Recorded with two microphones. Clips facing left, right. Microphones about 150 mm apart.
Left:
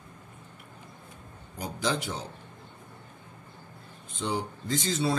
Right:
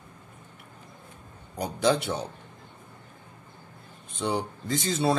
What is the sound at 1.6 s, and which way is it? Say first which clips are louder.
Speech: right 6 dB; 65° right (ahead or behind).